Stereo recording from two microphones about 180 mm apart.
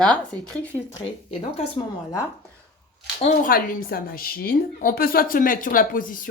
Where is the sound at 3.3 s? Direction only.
50° left (ahead or behind).